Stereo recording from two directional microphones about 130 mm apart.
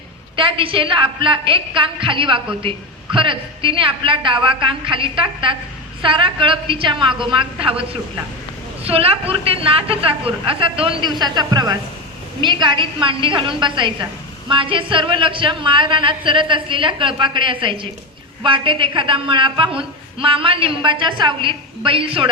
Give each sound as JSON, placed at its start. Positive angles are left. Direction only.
{"t": 0.3, "sound": "a woman's voice", "side_deg": -40}